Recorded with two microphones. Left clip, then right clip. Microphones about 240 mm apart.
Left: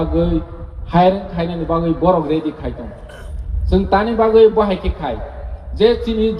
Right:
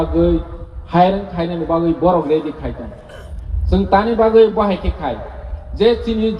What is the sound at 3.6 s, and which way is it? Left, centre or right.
A man's voice, left.